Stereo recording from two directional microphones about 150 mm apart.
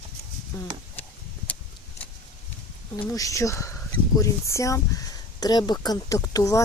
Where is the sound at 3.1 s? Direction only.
20° left (ahead or behind).